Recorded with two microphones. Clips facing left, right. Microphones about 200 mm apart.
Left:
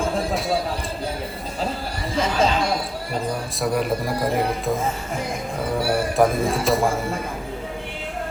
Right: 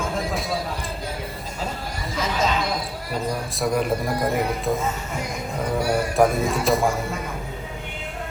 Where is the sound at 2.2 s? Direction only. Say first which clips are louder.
Left 4 dB; 30° left (ahead or behind).